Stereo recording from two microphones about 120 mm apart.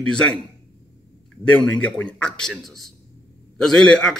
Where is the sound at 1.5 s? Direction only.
10° left (ahead or behind).